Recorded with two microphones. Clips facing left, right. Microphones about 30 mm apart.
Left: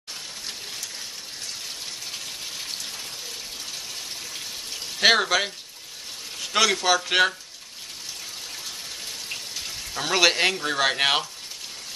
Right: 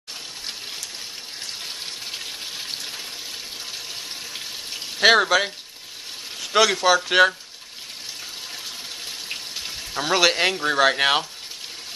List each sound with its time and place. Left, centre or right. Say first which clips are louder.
2.0 s gush: right 2 dB; right
5.0 s speech: right 3 dB; centre
9.9 s speech: right 1 dB; centre